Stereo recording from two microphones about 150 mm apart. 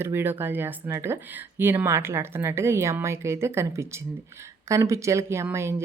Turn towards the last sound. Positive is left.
turn(degrees=-15)  # may be behind; listen again after turning